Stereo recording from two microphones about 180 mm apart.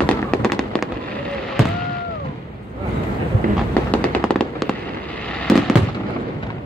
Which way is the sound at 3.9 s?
5° left (ahead or behind).